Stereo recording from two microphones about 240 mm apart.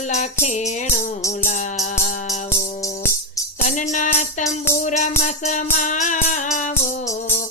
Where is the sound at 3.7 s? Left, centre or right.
Left.